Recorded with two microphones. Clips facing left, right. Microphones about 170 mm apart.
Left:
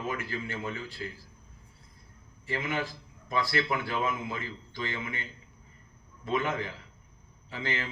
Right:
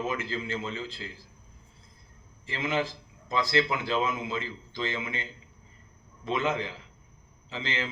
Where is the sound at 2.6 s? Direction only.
90° right.